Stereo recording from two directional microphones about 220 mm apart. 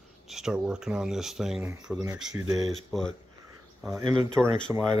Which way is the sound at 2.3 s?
15° right (ahead or behind).